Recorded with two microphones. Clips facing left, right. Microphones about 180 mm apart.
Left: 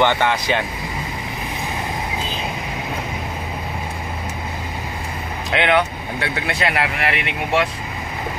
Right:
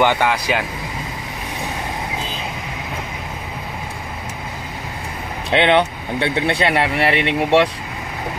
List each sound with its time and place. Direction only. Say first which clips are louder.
0.0 s speech: right 1 dB; 10° right (ahead or behind)
5.5 s speech: right 3 dB; 25° right (ahead or behind)